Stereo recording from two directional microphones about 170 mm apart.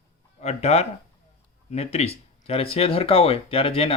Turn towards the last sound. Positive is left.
turn(degrees=35)  # may be behind; listen again after turning